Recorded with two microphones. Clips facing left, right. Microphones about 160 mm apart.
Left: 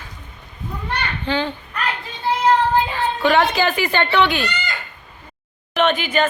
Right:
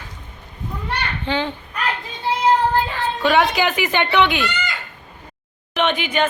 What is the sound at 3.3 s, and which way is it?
Speech, 15° right (ahead or behind).